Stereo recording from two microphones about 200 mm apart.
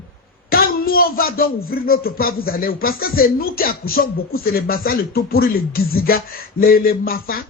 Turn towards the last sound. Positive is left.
turn(degrees=45)  # may be behind; listen again after turning